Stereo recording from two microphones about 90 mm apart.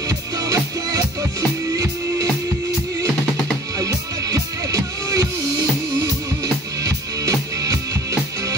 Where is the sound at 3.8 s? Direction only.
40° right (ahead or behind).